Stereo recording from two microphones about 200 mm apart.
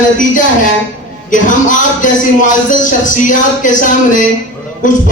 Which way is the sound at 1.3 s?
40° left (ahead or behind).